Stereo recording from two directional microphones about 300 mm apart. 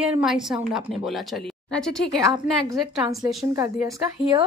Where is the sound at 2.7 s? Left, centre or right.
Centre.